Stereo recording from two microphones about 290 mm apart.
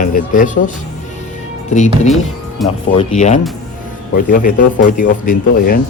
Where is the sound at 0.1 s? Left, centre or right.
Left.